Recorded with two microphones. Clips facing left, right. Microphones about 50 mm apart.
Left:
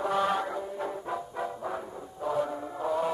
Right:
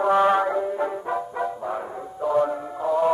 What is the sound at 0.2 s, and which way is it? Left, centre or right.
Music, right.